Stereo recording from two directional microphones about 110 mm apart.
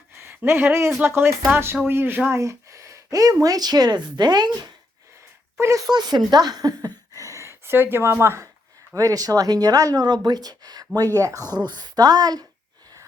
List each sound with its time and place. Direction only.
0.2 s speech: 20° right (ahead or behind); by 4.7 s 40° right (ahead or behind)
5.5 s speech: 25° right (ahead or behind)
5.9 s a woman's voice: 40° right (ahead or behind)